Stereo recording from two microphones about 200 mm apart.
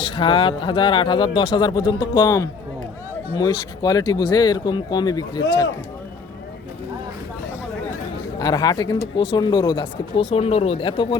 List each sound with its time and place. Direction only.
0.0 s speech: 25° left (ahead or behind)
8.4 s speech: 20° left (ahead or behind)